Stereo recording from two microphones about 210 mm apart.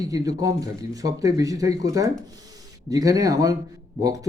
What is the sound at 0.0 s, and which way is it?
Speech, 15° right (ahead or behind).